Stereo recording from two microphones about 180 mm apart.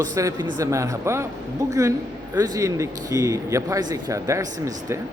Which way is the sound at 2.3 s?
20° right (ahead or behind).